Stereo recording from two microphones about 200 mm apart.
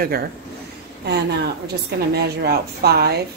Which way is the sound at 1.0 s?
55° right (ahead or behind).